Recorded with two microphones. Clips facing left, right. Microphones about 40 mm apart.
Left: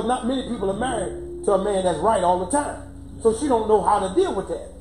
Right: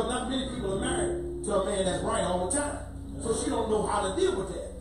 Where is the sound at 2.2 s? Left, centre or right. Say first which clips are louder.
Left 8 dB; centre.